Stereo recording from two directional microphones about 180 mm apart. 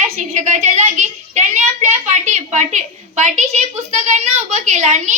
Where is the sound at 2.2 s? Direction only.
40° right (ahead or behind).